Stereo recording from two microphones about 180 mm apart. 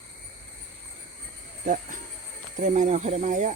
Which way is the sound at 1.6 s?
45° right (ahead or behind).